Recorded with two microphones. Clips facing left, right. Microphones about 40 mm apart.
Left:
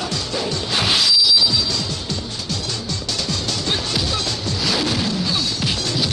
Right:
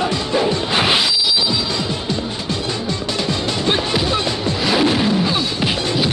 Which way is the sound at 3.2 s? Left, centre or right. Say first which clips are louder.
Right 5 dB; right.